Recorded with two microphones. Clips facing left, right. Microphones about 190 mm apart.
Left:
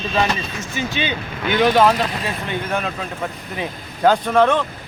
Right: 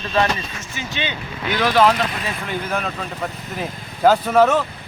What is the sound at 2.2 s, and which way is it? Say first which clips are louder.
Speech: left 1 dB; centre (ahead or behind).